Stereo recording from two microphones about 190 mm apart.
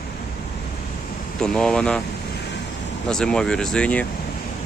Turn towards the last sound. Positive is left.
turn(degrees=5)  # may be behind; listen again after turning